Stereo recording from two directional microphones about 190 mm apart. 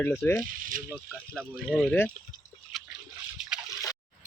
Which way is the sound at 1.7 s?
5° left (ahead or behind).